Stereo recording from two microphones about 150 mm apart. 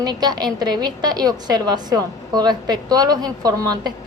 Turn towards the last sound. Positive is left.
turn(degrees=-25)  # may be behind; listen again after turning